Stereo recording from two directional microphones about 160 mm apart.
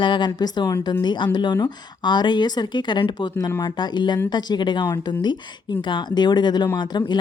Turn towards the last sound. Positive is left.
turn(degrees=25)  # may be behind; listen again after turning